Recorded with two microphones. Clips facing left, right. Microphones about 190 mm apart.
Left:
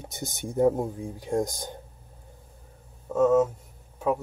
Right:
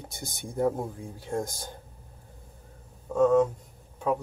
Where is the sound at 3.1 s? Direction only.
5° left (ahead or behind).